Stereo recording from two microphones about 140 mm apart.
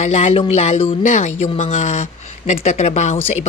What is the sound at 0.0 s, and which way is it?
Speech, 55° left (ahead or behind).